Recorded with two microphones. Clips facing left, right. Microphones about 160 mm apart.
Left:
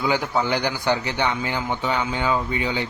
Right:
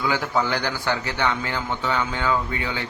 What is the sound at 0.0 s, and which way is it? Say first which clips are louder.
Speech: left 1 dB; 20° left (ahead or behind).